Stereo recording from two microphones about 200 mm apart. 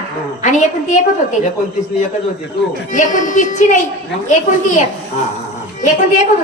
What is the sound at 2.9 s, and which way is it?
Speech, 40° left (ahead or behind).